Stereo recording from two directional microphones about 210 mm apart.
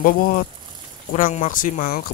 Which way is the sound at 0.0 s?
45° left (ahead or behind).